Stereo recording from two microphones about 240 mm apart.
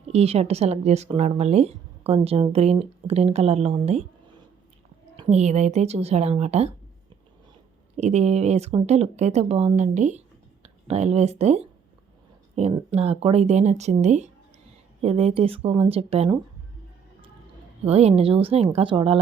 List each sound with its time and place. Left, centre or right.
0.0 s speech: right
5.1 s speech: right
7.9 s speech: right
17.8 s speech: right